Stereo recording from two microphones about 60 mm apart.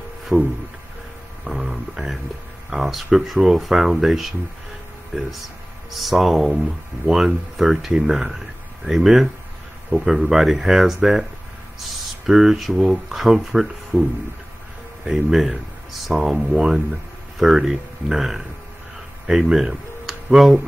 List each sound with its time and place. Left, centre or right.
0.3 s music: right
1.4 s a sound: centre
2.7 s speech: centre
5.9 s speech: centre
12.3 s speech: centre
15.0 s speech: centre